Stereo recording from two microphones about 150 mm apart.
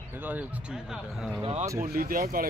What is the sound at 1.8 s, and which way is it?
Speech, 70° right (ahead or behind).